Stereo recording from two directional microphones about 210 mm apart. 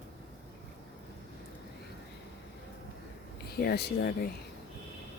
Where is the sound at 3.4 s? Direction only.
50° left (ahead or behind).